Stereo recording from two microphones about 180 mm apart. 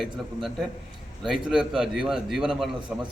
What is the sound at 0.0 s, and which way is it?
A man's voice, centre (ahead or behind).